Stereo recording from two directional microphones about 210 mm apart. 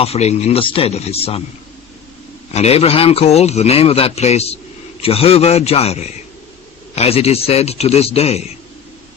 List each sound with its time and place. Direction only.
0.0 s speech: 30° left (ahead or behind)
2.5 s speech: 30° left (ahead or behind)